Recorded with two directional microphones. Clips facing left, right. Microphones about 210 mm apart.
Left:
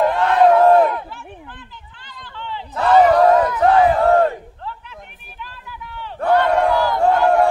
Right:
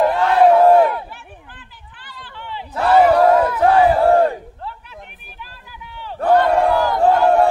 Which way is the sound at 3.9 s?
30° right (ahead or behind).